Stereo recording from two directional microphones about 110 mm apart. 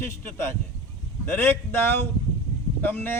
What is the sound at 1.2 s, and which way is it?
A man's voice, 20° left (ahead or behind).